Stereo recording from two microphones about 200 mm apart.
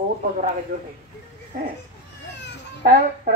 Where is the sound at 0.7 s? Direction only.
50° right (ahead or behind).